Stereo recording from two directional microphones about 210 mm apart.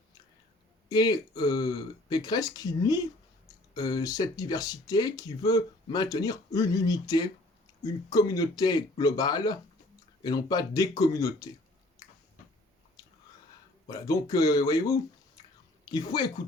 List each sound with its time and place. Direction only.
0.9 s speech: 20° left (ahead or behind)
13.0 s a sound: 20° left (ahead or behind)
13.8 s speech: 15° left (ahead or behind)